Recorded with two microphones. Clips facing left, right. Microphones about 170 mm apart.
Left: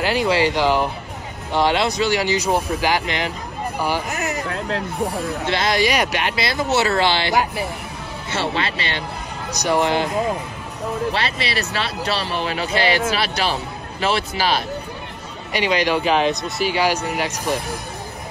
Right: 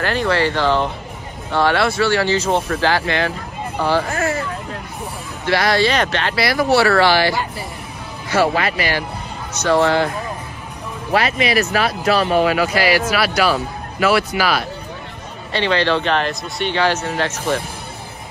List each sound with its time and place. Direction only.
0.0 s speech: 15° left (ahead or behind)
4.5 s hubbub: 75° left (ahead or behind)
5.5 s speech: 20° left (ahead or behind)
9.6 s speech: 15° left (ahead or behind)
11.1 s speech: 30° left (ahead or behind)
15.5 s speech: 15° left (ahead or behind)